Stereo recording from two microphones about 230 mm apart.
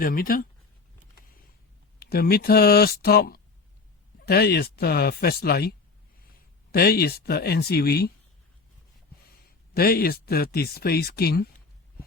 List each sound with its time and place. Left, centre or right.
0.0 s speech: left
2.0 s speech: left
9.7 s speech: left